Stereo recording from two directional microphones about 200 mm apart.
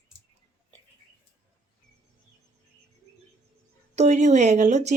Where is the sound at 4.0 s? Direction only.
35° right (ahead or behind).